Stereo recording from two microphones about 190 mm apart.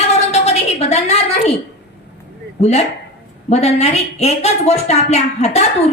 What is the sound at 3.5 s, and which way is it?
A woman's voice, 35° left (ahead or behind).